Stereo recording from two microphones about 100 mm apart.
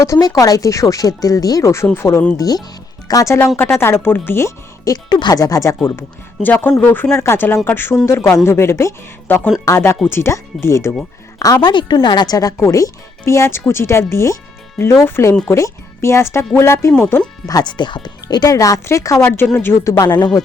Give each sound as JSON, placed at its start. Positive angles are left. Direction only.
{"t": 0.0, "sound": "speech", "side_deg": 35}
{"t": 2.4, "sound": "speech", "side_deg": 40}
{"t": 3.6, "sound": "speech", "side_deg": 25}
{"t": 5.0, "sound": "a woman's voice", "side_deg": 45}
{"t": 11.6, "sound": "speech", "side_deg": 50}
{"t": 17.4, "sound": "speech", "side_deg": 40}
{"t": 20.1, "sound": "speech", "side_deg": 45}